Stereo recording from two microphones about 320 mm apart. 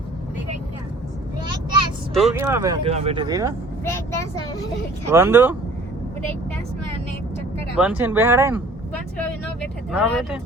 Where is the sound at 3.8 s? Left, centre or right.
Centre.